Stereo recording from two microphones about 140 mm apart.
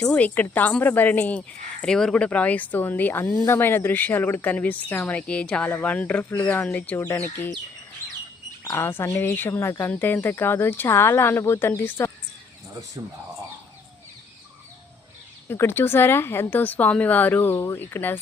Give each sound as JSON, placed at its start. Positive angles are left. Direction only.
{"t": 0.0, "sound": "speech", "side_deg": 10}
{"t": 8.6, "sound": "speech", "side_deg": 15}
{"t": 15.4, "sound": "speech", "side_deg": 15}